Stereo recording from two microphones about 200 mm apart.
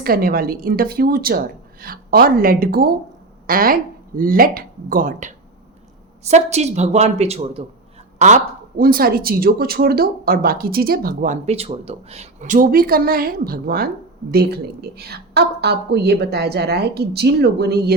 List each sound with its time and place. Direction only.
0.0 s a woman's voice: 50° right (ahead or behind)
8.8 s speech: 45° right (ahead or behind)